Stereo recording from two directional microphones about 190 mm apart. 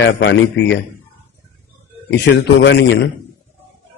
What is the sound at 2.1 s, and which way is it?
Speech, 65° left (ahead or behind).